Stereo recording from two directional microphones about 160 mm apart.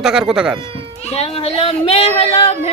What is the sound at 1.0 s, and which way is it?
Speech, 40° left (ahead or behind).